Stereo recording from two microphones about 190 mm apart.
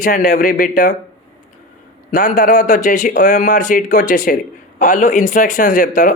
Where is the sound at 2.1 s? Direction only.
45° left (ahead or behind).